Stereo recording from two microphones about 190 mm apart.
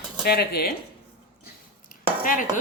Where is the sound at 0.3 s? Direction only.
55° left (ahead or behind).